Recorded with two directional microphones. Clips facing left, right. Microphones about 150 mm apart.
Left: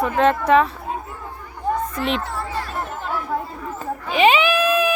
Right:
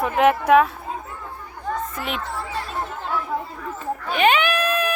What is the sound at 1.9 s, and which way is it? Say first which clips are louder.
Speech: left 6 dB; 5° right (ahead or behind).